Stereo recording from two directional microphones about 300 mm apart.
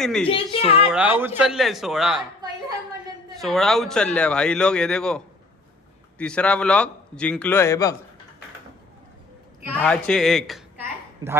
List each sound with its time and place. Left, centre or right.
0.0 s a man's voice: centre
0.3 s speech: centre
0.9 s a man's voice: centre
3.3 s a man's voice: centre
9.7 s a sound: centre